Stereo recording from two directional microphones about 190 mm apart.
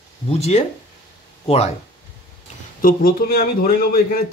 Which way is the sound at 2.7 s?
50° left (ahead or behind).